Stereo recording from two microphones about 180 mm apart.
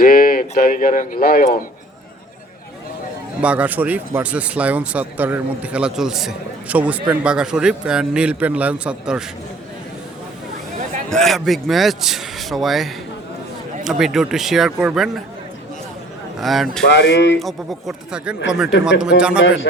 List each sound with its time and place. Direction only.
0.0 s speech: 50° left (ahead or behind)
3.4 s a man's voice: 10° right (ahead or behind)
11.1 s a man's voice: centre (ahead or behind)
16.4 s a man's voice: centre (ahead or behind)
16.8 s speech: 85° left
17.4 s a man's voice: centre (ahead or behind)